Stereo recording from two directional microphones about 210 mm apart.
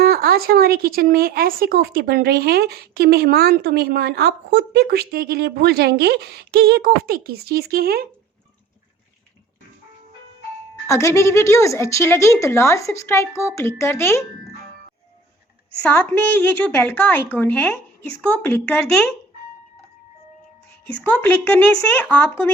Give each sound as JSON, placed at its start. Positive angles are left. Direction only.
{"t": 0.0, "sound": "speech", "side_deg": -45}
{"t": 10.8, "sound": "a woman's voice", "side_deg": 15}
{"t": 15.8, "sound": "a woman's voice", "side_deg": 5}
{"t": 21.0, "sound": "a woman's voice", "side_deg": 10}